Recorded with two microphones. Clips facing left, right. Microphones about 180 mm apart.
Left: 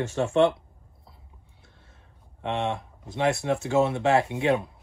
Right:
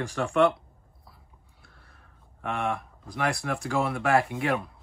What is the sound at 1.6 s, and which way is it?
Speech, 20° left (ahead or behind).